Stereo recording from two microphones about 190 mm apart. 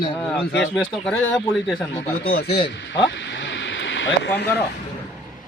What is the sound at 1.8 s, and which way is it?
Speech, 15° left (ahead or behind).